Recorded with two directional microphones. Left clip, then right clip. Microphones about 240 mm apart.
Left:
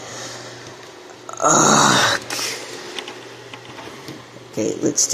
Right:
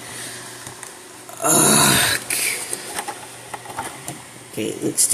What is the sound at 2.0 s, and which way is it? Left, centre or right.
Throat clearing, left.